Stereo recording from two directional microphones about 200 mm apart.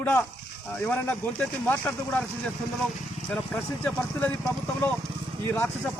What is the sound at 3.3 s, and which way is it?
Speech, 5° left (ahead or behind).